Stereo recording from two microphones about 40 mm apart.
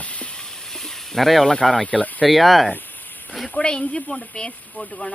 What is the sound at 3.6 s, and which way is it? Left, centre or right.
Speech, left.